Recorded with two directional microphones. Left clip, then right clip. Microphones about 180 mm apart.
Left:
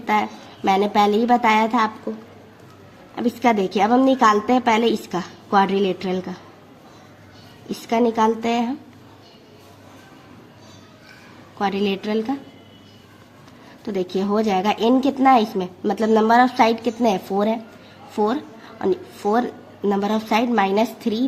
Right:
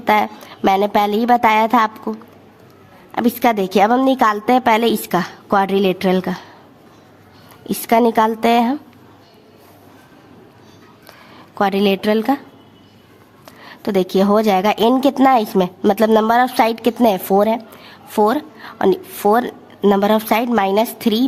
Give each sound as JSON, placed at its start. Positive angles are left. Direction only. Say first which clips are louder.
{"t": 0.0, "sound": "a woman's voice", "louder": "right 5 dB", "side_deg": -55}
{"t": 3.2, "sound": "a woman's voice", "louder": "right 3 dB", "side_deg": -50}
{"t": 7.7, "sound": "a woman's voice", "louder": "right 6 dB", "side_deg": -50}
{"t": 11.5, "sound": "a woman's voice", "louder": "right 6 dB", "side_deg": -50}
{"t": 13.8, "sound": "a woman's voice", "louder": "right 8 dB", "side_deg": -50}